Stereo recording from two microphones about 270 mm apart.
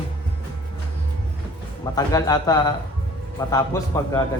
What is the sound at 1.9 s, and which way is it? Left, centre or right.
Speech, centre.